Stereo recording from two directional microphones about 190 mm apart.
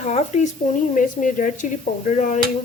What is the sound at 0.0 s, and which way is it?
A woman's voice, 35° left (ahead or behind).